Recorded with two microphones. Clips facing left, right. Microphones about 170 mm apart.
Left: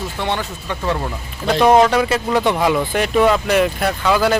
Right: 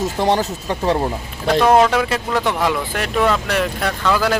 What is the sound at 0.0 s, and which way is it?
Speech, 40° right (ahead or behind).